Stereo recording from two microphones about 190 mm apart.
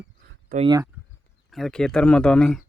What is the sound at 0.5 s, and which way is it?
Speech, 50° right (ahead or behind).